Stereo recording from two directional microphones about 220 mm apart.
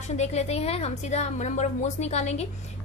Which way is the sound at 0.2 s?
30° left (ahead or behind).